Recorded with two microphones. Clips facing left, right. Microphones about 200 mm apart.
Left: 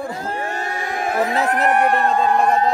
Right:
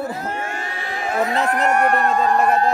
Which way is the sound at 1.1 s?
5° left (ahead or behind).